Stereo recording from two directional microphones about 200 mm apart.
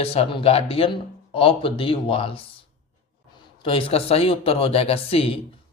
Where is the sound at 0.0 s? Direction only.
30° left (ahead or behind).